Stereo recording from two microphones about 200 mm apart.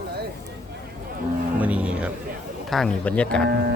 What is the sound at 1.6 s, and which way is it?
Speech, 5° right (ahead or behind).